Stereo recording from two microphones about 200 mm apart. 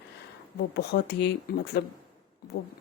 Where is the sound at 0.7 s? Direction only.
55° left (ahead or behind).